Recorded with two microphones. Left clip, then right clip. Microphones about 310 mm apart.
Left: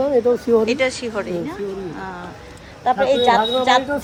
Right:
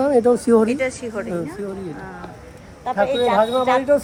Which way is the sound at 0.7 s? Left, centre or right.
Centre.